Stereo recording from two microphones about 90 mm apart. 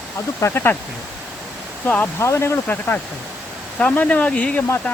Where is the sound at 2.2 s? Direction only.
30° left (ahead or behind).